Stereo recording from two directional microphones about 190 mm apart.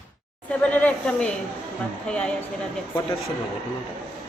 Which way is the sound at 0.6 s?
10° left (ahead or behind).